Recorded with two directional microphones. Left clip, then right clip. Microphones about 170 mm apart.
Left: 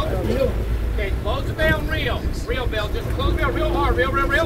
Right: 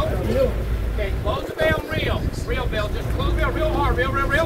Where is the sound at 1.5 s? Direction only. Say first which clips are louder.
Left 1 dB; 15° right (ahead or behind).